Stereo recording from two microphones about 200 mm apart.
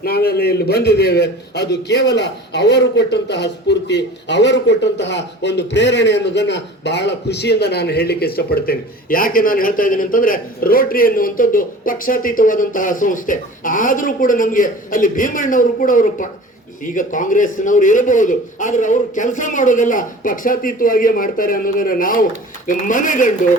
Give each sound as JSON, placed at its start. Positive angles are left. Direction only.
{"t": 0.0, "sound": "a man's voice", "side_deg": 50}